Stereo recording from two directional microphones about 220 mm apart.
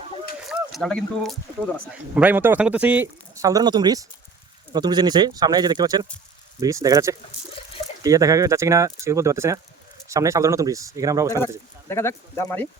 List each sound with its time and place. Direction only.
0.4 s a sound: centre (ahead or behind)
1.9 s speech: 5° right (ahead or behind)
11.3 s speech: 10° left (ahead or behind)